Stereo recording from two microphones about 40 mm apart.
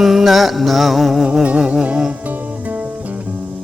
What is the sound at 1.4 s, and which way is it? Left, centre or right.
Music, right.